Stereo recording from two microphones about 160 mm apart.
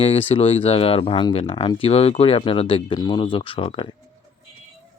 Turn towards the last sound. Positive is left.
turn(degrees=35)  # may be behind; listen again after turning